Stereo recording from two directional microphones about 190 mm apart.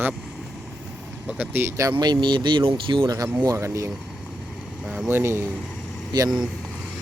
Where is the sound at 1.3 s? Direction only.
10° right (ahead or behind).